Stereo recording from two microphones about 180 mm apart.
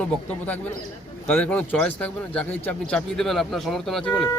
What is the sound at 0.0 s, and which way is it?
Speech, 10° left (ahead or behind).